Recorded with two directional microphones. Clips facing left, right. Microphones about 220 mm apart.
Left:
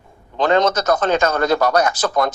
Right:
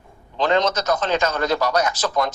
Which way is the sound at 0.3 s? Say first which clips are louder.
Left 3 dB; 50° left (ahead or behind).